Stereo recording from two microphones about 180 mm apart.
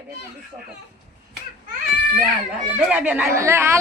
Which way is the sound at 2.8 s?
10° right (ahead or behind).